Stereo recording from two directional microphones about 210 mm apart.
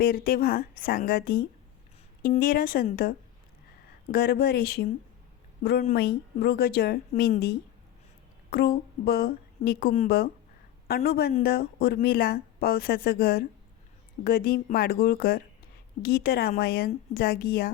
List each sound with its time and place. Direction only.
0.0 s a woman's voice: 45° left (ahead or behind)
5.9 s a woman's voice: 50° left (ahead or behind)